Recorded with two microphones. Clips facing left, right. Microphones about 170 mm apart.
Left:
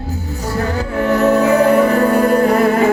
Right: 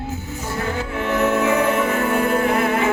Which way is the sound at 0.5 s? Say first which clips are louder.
Left 6 dB; 40° left (ahead or behind).